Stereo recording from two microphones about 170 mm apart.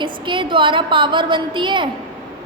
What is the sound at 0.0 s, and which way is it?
A woman's voice, 30° right (ahead or behind).